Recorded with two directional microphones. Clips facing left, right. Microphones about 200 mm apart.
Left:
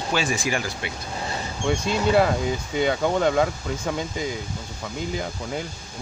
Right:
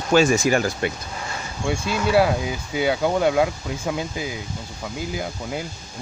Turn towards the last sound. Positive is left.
turn(degrees=-5)  # may be behind; listen again after turning